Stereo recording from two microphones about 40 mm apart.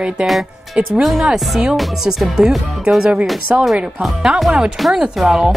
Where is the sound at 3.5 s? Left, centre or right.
Right.